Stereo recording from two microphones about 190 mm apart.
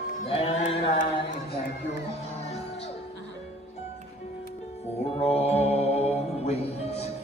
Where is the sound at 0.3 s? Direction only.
35° left (ahead or behind).